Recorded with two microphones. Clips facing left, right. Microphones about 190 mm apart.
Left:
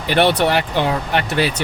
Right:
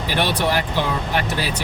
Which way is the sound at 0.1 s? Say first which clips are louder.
Left 6 dB; 65° left (ahead or behind).